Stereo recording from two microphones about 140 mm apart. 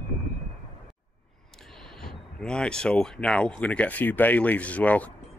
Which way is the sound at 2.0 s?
5° left (ahead or behind).